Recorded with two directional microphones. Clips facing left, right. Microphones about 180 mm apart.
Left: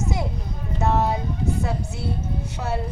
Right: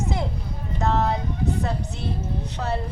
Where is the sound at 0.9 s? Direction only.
10° left (ahead or behind).